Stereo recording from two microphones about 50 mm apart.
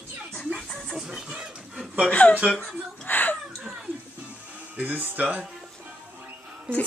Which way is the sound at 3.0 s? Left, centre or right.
Left.